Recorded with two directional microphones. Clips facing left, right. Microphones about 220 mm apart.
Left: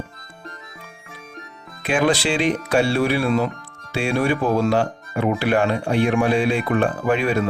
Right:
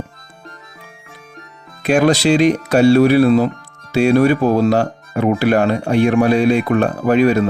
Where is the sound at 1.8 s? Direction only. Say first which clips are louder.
Right 6 dB; 40° right (ahead or behind).